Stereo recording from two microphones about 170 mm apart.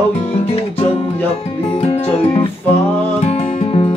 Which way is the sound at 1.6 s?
35° left (ahead or behind).